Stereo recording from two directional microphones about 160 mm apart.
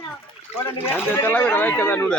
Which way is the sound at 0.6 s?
15° left (ahead or behind).